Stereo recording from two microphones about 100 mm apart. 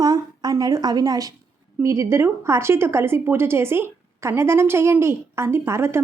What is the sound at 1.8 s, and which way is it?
A woman's voice, 30° right (ahead or behind).